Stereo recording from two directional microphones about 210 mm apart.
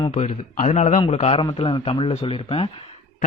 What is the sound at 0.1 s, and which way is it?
A man's voice, 40° left (ahead or behind).